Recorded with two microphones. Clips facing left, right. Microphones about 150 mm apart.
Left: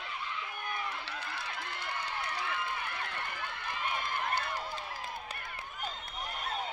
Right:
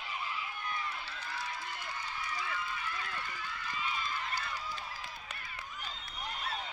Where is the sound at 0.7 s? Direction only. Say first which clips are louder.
Left 4 dB; 60° left (ahead or behind).